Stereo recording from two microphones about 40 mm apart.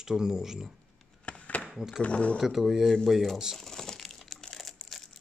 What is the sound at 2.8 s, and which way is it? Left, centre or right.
Speech, centre.